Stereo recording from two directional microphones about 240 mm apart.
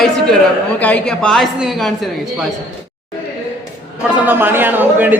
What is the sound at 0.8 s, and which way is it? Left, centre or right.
A man's voice, centre.